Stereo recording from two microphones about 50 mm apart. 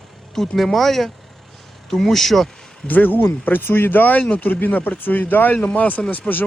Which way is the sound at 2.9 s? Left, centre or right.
Left.